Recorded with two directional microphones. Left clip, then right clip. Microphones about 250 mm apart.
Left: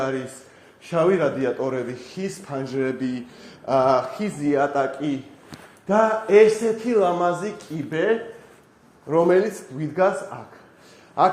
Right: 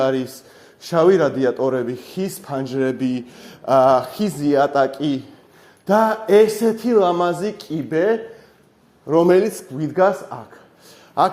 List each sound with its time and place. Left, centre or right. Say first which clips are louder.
0.9 s speech: right 5 dB; right
5.9 s speech: right 2 dB; right
11.2 s speech: right 1 dB; right